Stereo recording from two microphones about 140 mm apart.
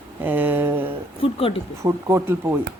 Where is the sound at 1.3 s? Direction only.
40° left (ahead or behind).